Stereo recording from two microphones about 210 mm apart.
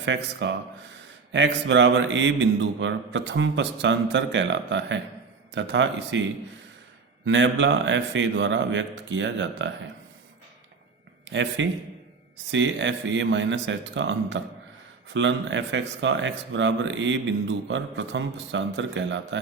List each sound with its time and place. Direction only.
0.0 s speech: 60° right (ahead or behind)
7.3 s speech: 60° right (ahead or behind)
11.3 s speech: 60° right (ahead or behind)